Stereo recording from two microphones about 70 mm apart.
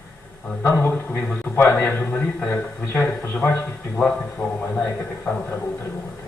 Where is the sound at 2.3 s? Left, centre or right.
Centre.